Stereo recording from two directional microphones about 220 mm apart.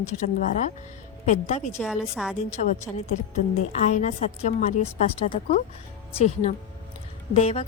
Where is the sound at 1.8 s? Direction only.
5° right (ahead or behind).